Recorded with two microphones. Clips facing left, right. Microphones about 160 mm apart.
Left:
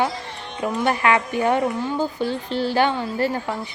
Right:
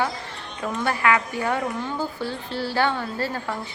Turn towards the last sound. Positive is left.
turn(degrees=15)  # may be behind; listen again after turning